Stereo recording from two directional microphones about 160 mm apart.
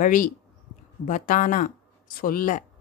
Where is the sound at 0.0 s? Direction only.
55° left (ahead or behind).